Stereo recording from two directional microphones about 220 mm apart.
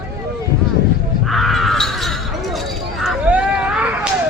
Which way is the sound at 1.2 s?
Centre (ahead or behind).